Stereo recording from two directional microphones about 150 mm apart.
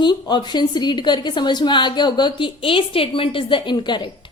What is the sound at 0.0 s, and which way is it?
Speech, 30° left (ahead or behind).